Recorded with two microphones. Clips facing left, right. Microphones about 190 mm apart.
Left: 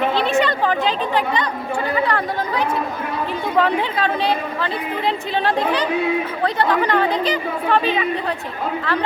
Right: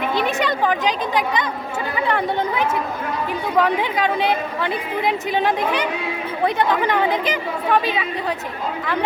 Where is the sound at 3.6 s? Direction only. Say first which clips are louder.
Even; 15° right (ahead or behind).